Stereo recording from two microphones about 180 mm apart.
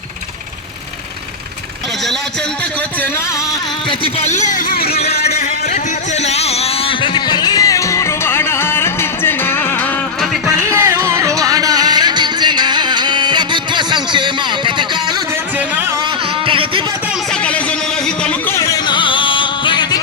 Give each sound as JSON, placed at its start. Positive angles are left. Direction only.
{"t": 3.8, "sound": "a man's voice", "side_deg": 35}
{"t": 4.9, "sound": "a sound", "side_deg": 35}
{"t": 10.5, "sound": "music", "side_deg": -15}
{"t": 16.5, "sound": "music", "side_deg": -30}
{"t": 17.4, "sound": "music", "side_deg": 5}